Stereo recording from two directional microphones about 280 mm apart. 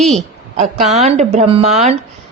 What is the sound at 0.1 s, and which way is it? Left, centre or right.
A woman's voice, right.